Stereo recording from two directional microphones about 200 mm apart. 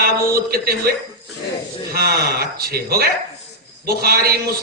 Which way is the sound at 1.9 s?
50° right (ahead or behind).